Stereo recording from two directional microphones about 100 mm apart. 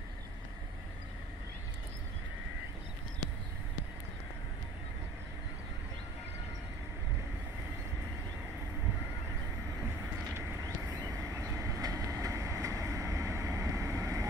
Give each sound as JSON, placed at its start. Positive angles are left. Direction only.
{"t": 11.1, "sound": "vehicle", "side_deg": -30}